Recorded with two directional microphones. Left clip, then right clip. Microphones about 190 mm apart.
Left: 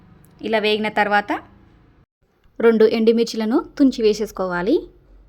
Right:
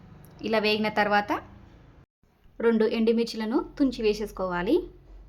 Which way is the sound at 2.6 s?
35° left (ahead or behind).